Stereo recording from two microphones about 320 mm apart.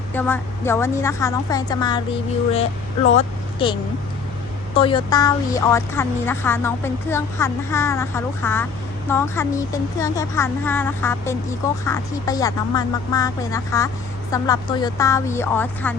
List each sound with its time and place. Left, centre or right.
0.1 s speech: centre
3.2 s speech: centre